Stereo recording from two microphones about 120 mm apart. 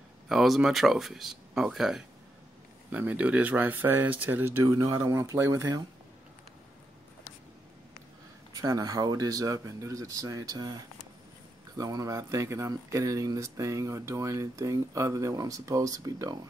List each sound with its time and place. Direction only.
0.3 s speech: centre (ahead or behind)
2.9 s speech: 15° right (ahead or behind)
4.6 s speech: 30° right (ahead or behind)
8.5 s speech: 30° right (ahead or behind)